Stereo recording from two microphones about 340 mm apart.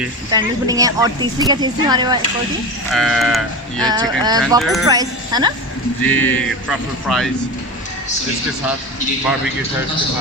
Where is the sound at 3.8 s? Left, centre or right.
Centre.